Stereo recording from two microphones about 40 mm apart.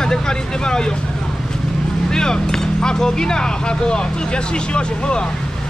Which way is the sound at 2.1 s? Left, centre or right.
Centre.